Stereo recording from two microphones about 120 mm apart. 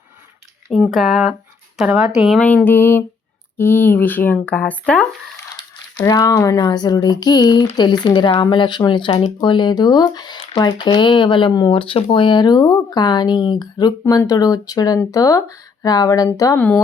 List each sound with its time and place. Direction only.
0.7 s speech: centre (ahead or behind)
2.4 s speech: 10° left (ahead or behind)
6.1 s speech: 30° left (ahead or behind)
16.6 s speech: 15° left (ahead or behind)